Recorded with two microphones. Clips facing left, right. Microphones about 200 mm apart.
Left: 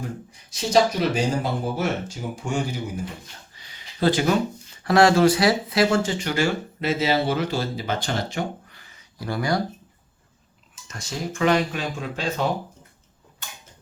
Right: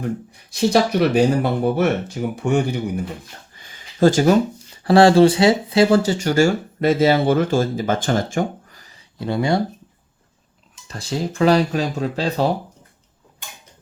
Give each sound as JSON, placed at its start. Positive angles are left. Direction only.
{"t": 0.5, "sound": "speech", "side_deg": -60}
{"t": 3.6, "sound": "a sound", "side_deg": -50}
{"t": 4.8, "sound": "speech", "side_deg": -30}
{"t": 6.0, "sound": "speech", "side_deg": -40}
{"t": 9.1, "sound": "speech", "side_deg": -25}
{"t": 10.8, "sound": "speech", "side_deg": -35}